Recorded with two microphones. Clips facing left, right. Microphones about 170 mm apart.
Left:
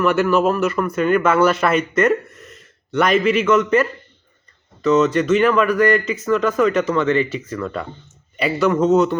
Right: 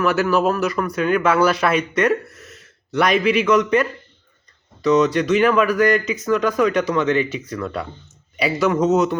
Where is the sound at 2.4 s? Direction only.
75° right (ahead or behind).